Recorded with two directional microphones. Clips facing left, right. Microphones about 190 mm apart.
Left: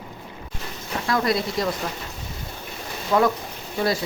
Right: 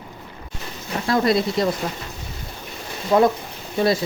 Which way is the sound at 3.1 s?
25° right (ahead or behind).